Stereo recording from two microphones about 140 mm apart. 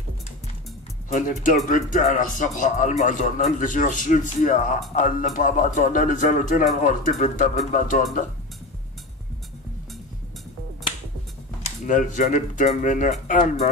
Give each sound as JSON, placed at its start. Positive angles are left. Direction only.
{"t": 1.1, "sound": "speech", "side_deg": 70}
{"t": 11.8, "sound": "speech", "side_deg": 65}